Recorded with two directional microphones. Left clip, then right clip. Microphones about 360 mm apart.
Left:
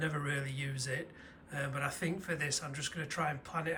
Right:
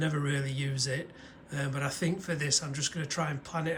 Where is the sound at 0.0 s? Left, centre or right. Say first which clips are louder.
Right 3 dB; centre.